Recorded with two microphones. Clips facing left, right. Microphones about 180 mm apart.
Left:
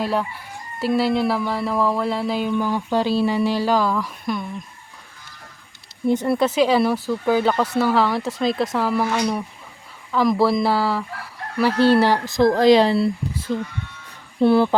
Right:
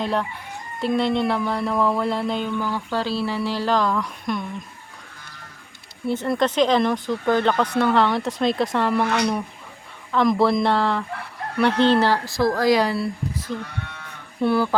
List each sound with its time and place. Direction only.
0.0 s speech: 5° left (ahead or behind)
2.6 s speech: 15° left (ahead or behind)
6.1 s speech: 15° left (ahead or behind)
10.1 s fowl: 5° left (ahead or behind)
11.8 s speech: 10° left (ahead or behind); by 13.4 s 25° left (ahead or behind)
14.4 s speech: 25° left (ahead or behind)